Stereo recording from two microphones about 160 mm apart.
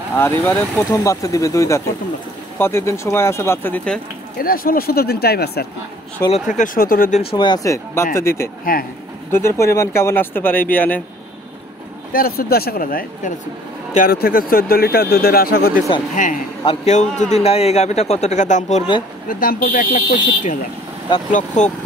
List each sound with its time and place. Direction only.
0.1 s speech: 10° left (ahead or behind)
4.4 s speech: 65° left (ahead or behind)
6.5 s speech: 55° left (ahead or behind)
7.2 s speech: 35° left (ahead or behind); by 8.5 s 15° left (ahead or behind)
8.7 s speech: 60° left (ahead or behind)
9.3 s speech: 15° left (ahead or behind)
12.1 s speech: 65° left (ahead or behind)
16.2 s speech: 55° left (ahead or behind)
16.6 s a man's voice: 40° left (ahead or behind)
19.2 s a man's voice: 65° left (ahead or behind)